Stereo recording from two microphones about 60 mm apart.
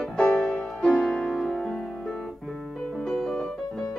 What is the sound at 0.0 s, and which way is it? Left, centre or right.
Music, centre.